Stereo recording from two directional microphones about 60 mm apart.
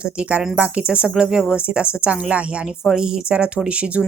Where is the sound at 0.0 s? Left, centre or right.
Right.